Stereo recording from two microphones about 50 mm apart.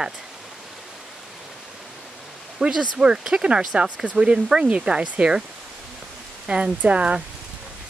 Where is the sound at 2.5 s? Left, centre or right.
Centre.